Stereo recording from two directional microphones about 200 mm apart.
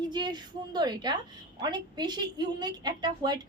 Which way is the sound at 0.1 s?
20° right (ahead or behind).